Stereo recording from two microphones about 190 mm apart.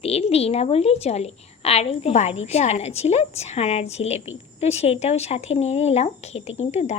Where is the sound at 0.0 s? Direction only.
30° left (ahead or behind).